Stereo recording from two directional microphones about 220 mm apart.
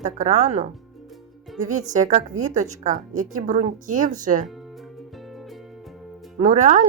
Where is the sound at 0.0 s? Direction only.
35° right (ahead or behind).